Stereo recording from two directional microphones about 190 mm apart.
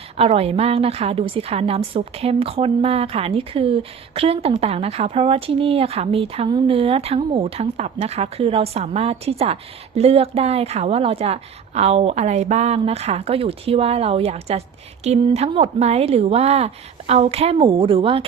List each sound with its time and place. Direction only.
0.2 s a woman's voice: 30° right (ahead or behind)